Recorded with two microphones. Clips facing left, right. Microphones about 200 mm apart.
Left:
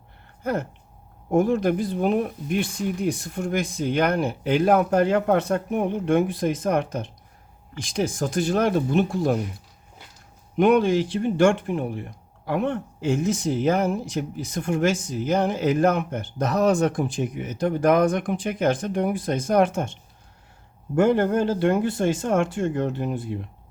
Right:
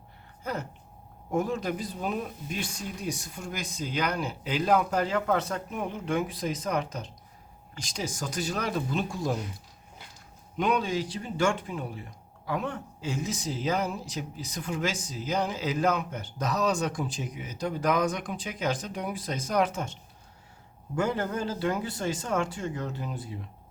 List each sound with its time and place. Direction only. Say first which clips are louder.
0.4 s speech: left 8 dB; 55° left (ahead or behind)
10.6 s speech: left 9 dB; 55° left (ahead or behind)
20.9 s speech: left 10 dB; 55° left (ahead or behind)